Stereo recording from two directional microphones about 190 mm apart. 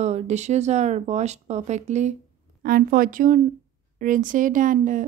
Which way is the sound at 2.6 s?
50° right (ahead or behind).